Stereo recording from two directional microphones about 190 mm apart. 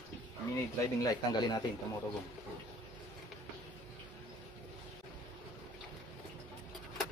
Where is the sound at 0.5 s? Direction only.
15° left (ahead or behind).